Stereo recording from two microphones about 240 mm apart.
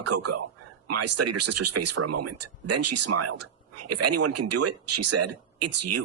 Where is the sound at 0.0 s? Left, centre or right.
Right.